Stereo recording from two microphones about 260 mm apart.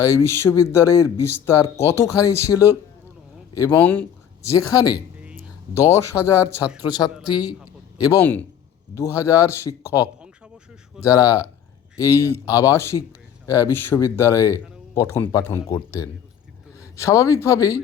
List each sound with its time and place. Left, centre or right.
0.0 s speech: centre
7.4 s a sound: centre
8.0 s speech: centre
10.0 s a sound: centre
11.0 s speech: centre
16.8 s a man's voice: centre